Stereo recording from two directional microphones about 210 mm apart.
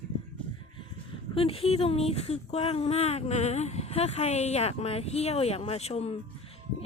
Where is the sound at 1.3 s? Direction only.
25° left (ahead or behind).